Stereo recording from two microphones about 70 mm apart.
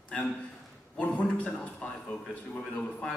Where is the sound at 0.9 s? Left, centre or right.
Left.